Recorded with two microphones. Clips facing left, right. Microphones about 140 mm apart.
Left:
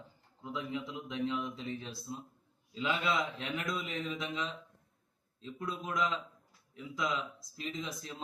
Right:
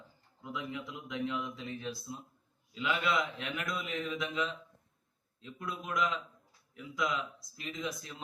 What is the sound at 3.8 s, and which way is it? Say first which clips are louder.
A man's voice: right 1 dB; 30° left (ahead or behind).